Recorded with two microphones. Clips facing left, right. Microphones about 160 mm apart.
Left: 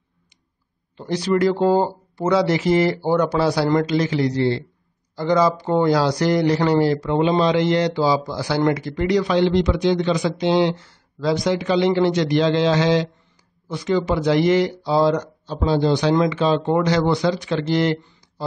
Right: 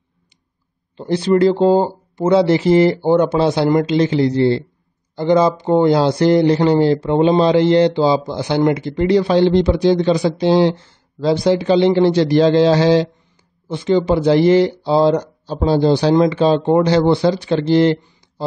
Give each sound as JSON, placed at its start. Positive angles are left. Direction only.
{"t": 0.9, "sound": "speech", "side_deg": -30}